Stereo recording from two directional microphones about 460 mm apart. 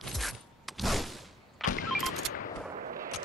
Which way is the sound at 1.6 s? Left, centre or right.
Centre.